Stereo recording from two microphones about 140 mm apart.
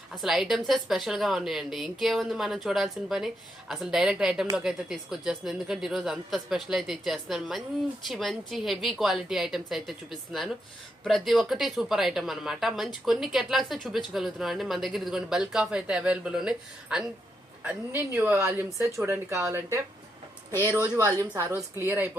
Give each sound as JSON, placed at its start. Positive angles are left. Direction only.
{"t": 0.2, "sound": "a woman's voice", "side_deg": 0}
{"t": 11.0, "sound": "a woman's voice", "side_deg": 0}
{"t": 20.8, "sound": "speech", "side_deg": -20}